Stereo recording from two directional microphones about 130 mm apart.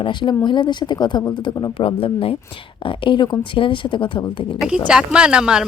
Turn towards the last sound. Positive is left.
turn(degrees=-5)  # may be behind; listen again after turning